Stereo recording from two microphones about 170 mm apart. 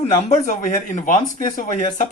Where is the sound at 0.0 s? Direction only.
40° left (ahead or behind).